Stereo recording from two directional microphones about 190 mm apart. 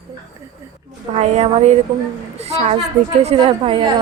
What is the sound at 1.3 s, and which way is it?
A woman's voice, 35° right (ahead or behind).